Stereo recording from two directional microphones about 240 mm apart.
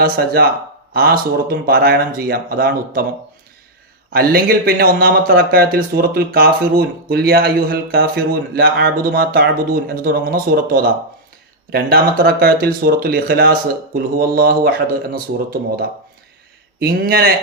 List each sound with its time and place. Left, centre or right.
0.0 s speech: right
4.1 s speech: right
16.8 s speech: right